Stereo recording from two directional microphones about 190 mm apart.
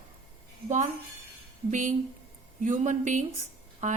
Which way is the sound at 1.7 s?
40° right (ahead or behind).